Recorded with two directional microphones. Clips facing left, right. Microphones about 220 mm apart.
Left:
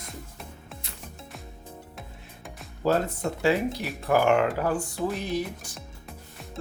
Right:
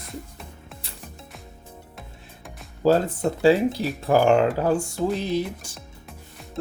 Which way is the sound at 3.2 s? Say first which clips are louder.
Right 7 dB; 30° right (ahead or behind).